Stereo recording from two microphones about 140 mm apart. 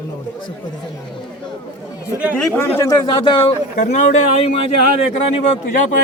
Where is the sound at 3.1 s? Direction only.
40° left (ahead or behind).